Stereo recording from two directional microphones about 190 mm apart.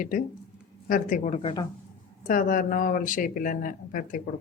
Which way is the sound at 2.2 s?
45° left (ahead or behind).